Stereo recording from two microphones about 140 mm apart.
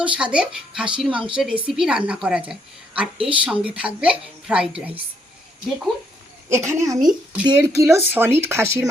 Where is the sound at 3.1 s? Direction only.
40° right (ahead or behind).